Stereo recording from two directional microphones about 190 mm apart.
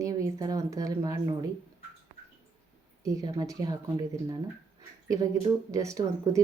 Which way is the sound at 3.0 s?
20° right (ahead or behind).